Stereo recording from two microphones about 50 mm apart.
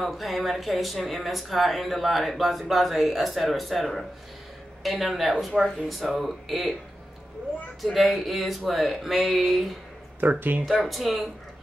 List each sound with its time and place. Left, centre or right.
0.0 s speech: centre
7.8 s speech: centre
10.2 s speech: right
10.6 s speech: centre